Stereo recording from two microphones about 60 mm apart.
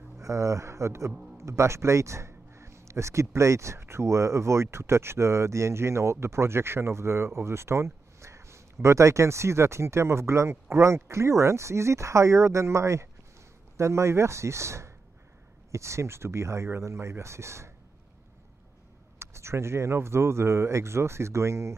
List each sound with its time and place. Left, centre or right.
0.2 s speech: right
19.1 s speech: right